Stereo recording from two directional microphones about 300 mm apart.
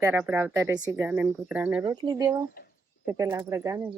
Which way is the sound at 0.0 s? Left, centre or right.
Centre.